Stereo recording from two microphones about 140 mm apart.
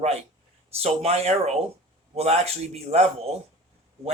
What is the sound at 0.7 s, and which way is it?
Speech, 45° right (ahead or behind).